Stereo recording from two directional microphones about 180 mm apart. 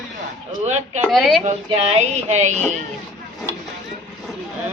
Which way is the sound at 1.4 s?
35° right (ahead or behind).